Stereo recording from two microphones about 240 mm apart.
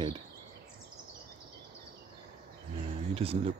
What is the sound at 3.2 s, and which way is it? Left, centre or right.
Speech, right.